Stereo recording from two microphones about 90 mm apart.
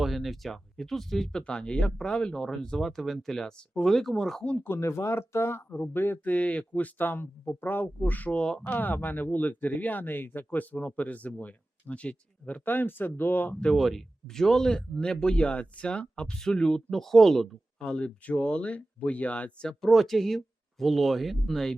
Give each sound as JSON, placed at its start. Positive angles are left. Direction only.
{"t": 0.0, "sound": "speech", "side_deg": 0}
{"t": 4.5, "sound": "speech", "side_deg": 25}
{"t": 13.7, "sound": "speech", "side_deg": 0}
{"t": 19.8, "sound": "speech", "side_deg": 0}